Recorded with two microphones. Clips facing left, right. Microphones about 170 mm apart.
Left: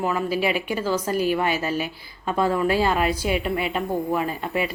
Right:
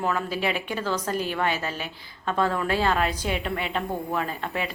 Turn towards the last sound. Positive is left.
turn(degrees=10)  # may be behind; listen again after turning